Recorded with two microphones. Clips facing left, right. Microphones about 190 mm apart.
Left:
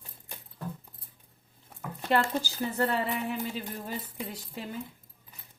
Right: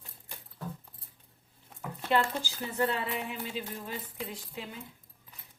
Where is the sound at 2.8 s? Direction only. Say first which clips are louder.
Left 1 dB; 40° left (ahead or behind).